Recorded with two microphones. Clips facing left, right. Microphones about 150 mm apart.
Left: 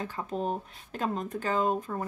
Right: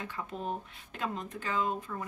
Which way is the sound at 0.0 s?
35° left (ahead or behind).